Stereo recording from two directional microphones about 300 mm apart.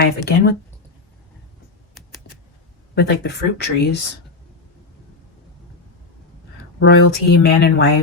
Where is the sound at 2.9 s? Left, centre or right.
Left.